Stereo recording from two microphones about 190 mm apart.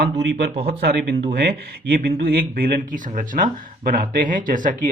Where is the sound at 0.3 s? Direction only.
60° right (ahead or behind).